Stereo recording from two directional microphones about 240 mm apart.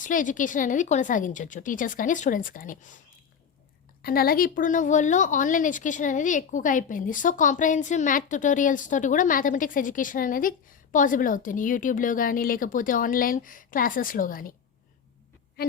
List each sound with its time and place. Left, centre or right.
0.0 s a woman's voice: left
4.0 s a woman's voice: left
15.6 s music: left